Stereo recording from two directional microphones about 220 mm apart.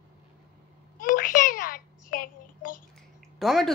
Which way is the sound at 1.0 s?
35° left (ahead or behind).